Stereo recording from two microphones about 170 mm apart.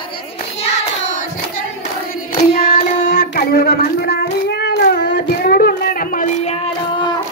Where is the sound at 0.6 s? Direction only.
40° left (ahead or behind).